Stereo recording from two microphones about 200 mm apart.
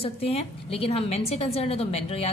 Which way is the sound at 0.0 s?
30° left (ahead or behind).